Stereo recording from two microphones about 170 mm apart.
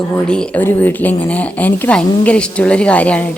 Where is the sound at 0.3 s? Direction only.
5° left (ahead or behind).